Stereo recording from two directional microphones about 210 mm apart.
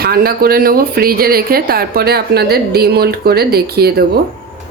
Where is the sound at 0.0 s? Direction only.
45° right (ahead or behind).